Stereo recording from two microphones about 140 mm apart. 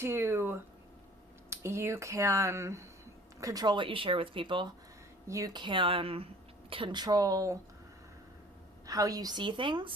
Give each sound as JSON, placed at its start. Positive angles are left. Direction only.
{"t": 0.0, "sound": "speech", "side_deg": -15}
{"t": 5.3, "sound": "speech", "side_deg": -25}
{"t": 5.6, "sound": "speech", "side_deg": -35}
{"t": 8.9, "sound": "speech", "side_deg": -25}